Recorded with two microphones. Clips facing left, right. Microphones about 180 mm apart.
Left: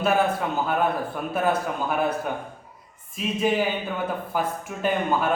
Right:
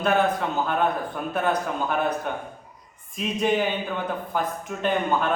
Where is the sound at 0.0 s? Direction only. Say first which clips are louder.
Even; 5° left (ahead or behind).